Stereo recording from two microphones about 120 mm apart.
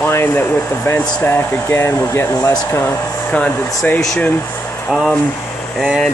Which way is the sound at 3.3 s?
10° left (ahead or behind).